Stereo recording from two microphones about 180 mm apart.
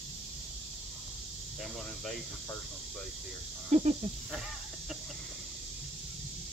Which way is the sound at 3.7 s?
40° right (ahead or behind).